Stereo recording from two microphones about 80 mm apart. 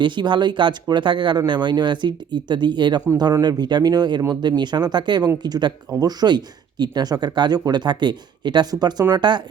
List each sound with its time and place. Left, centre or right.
0.0 s speech: right
9.1 s speech: right